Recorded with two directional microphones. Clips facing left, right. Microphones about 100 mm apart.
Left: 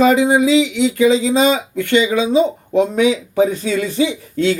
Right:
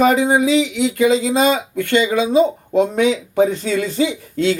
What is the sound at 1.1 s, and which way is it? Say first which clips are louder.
Speech: left 1 dB; 50° right (ahead or behind).